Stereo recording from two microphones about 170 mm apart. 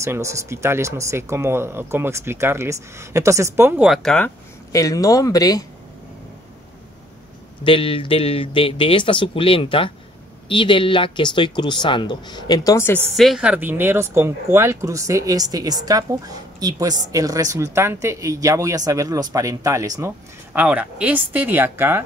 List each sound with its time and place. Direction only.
0.0 s speech: 15° right (ahead or behind); by 4.3 s 5° left (ahead or behind)
4.7 s speech: 20° left (ahead or behind)
7.6 s speech: 30° left (ahead or behind); by 13.0 s 15° left (ahead or behind)
13.1 s speech: centre (ahead or behind)